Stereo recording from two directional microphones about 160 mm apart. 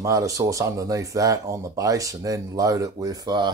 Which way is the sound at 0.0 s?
20° right (ahead or behind).